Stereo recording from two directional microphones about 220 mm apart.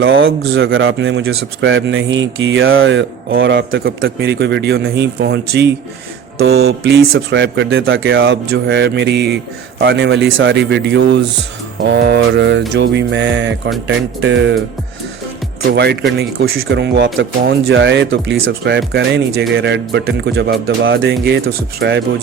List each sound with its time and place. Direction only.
0.0 s speech: 55° right (ahead or behind)
15.7 s speech: 50° right (ahead or behind)